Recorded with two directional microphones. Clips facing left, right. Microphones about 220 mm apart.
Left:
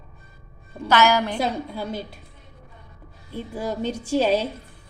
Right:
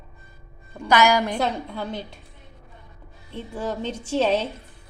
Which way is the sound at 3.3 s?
10° left (ahead or behind).